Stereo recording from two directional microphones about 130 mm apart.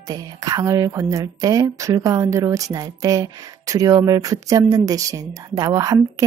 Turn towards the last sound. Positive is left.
turn(degrees=-30)  # may be behind; listen again after turning